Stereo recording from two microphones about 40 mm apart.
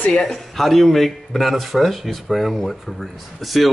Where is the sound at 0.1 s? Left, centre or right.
Centre.